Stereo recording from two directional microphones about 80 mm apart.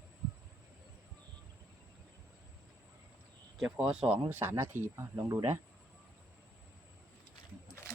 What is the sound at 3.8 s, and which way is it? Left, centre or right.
Speech, centre.